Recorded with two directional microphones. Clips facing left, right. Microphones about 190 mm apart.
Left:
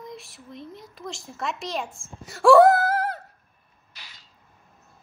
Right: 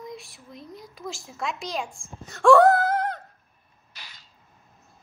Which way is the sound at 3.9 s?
45° right (ahead or behind).